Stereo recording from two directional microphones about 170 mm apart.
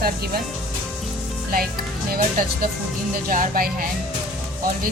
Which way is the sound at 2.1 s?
55° right (ahead or behind).